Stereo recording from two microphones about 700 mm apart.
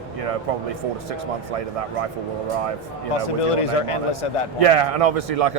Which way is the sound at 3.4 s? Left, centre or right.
Left.